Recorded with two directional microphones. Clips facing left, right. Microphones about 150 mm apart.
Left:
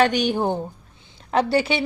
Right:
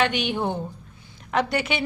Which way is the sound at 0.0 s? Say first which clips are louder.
Left 4 dB; 40° left (ahead or behind).